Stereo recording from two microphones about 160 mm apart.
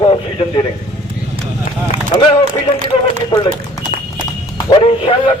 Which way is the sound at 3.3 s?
20° left (ahead or behind).